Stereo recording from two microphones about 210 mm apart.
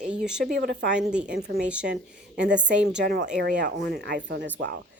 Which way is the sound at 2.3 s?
60° right (ahead or behind).